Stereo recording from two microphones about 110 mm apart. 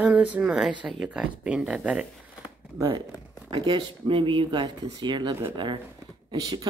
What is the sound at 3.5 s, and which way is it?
Speech, 45° right (ahead or behind).